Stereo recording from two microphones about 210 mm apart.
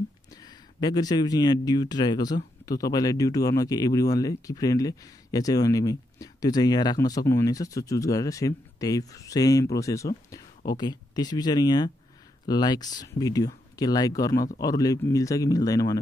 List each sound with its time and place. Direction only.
0.3 s speech: 20° left (ahead or behind)